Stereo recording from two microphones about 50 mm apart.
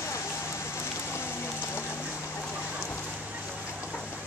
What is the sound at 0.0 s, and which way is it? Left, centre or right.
Rain, left.